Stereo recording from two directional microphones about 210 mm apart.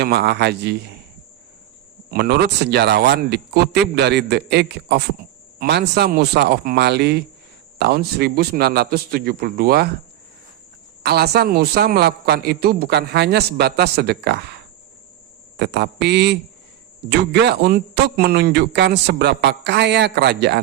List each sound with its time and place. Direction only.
0.0 s a man's voice: 50° right (ahead or behind)
2.0 s a man's voice: 50° right (ahead or behind)
11.0 s a man's voice: 50° right (ahead or behind)